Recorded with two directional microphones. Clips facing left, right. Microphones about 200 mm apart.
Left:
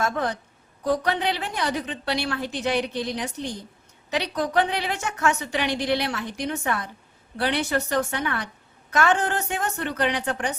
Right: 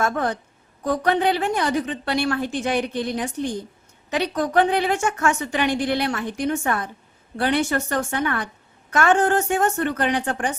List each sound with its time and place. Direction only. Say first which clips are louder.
0.0 s a woman's voice: right 3 dB; 50° right (ahead or behind)